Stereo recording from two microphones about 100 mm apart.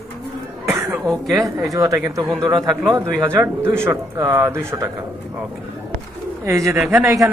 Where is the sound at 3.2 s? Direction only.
25° right (ahead or behind).